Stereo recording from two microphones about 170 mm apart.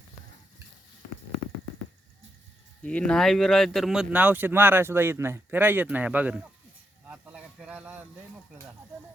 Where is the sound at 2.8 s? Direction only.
5° left (ahead or behind); by 6.5 s 10° right (ahead or behind).